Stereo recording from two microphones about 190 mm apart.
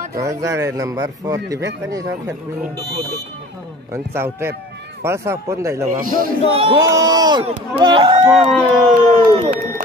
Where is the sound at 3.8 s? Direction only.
15° right (ahead or behind).